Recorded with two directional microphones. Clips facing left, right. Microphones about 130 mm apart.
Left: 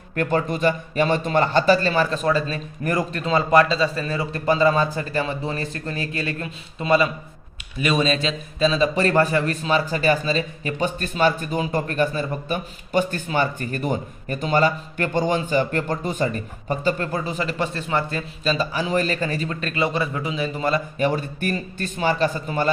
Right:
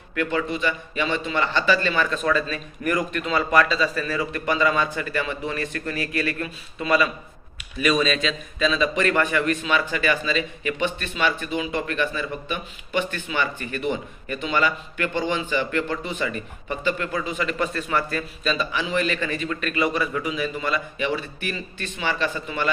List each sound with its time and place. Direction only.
0.1 s a man's voice: 40° left (ahead or behind)